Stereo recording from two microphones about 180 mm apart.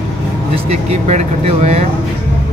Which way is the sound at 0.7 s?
40° right (ahead or behind).